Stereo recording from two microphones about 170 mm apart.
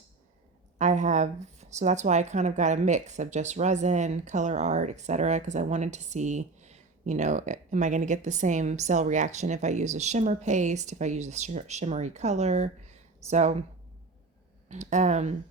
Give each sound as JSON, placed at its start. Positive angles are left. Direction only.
{"t": 0.8, "sound": "speech", "side_deg": -45}
{"t": 14.7, "sound": "speech", "side_deg": -45}